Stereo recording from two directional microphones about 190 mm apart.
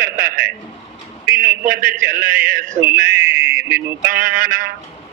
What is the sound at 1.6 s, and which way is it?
A man's voice, 50° right (ahead or behind).